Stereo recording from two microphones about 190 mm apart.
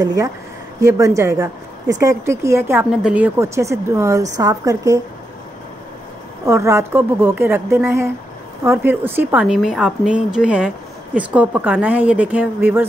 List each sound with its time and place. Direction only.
0.0 s a woman's voice: 15° right (ahead or behind)
6.4 s a woman's voice: 15° right (ahead or behind)